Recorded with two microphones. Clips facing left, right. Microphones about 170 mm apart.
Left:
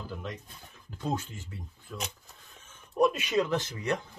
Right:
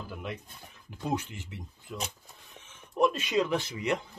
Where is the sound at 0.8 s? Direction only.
15° right (ahead or behind).